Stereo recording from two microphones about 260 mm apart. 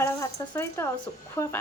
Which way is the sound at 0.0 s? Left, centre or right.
Centre.